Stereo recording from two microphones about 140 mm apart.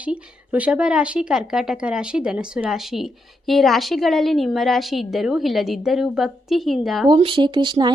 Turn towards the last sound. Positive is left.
turn(degrees=-35)  # may be behind; listen again after turning